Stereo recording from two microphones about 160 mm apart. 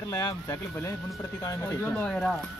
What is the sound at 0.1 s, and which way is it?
Speech, 25° left (ahead or behind).